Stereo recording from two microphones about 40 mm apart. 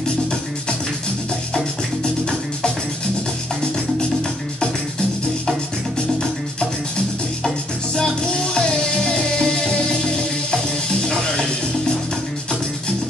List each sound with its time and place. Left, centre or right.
7.4 s music: centre